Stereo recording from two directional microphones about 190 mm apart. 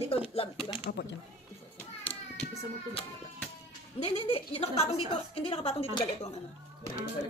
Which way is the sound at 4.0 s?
30° left (ahead or behind).